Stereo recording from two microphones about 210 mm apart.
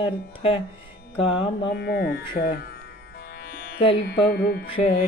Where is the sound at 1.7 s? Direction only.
50° left (ahead or behind).